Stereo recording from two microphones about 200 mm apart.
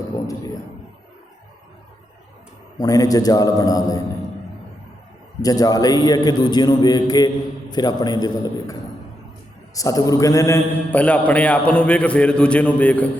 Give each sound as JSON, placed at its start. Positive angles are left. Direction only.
{"t": 2.7, "sound": "a man's voice", "side_deg": 20}
{"t": 5.4, "sound": "a man's voice", "side_deg": 20}
{"t": 9.7, "sound": "a man's voice", "side_deg": 15}